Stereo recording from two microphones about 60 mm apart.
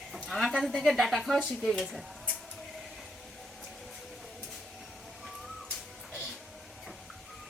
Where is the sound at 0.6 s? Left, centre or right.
Centre.